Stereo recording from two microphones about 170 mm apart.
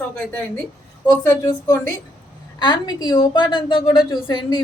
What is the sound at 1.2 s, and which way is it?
A woman's voice, 20° left (ahead or behind).